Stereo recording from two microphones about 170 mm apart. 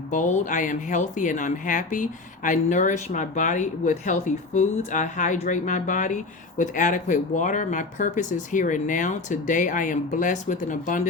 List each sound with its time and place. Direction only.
0.1 s speech: 45° left (ahead or behind)